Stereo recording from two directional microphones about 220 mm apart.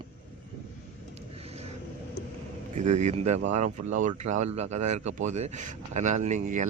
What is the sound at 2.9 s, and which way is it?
Speech, 30° right (ahead or behind).